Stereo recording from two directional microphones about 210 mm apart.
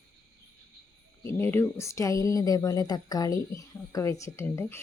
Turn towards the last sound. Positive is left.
turn(degrees=10)  # may be behind; listen again after turning